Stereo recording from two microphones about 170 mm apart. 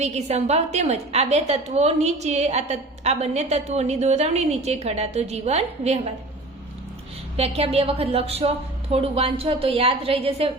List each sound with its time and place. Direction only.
0.0 s a woman's voice: 40° right (ahead or behind)
7.3 s a woman's voice: 35° right (ahead or behind)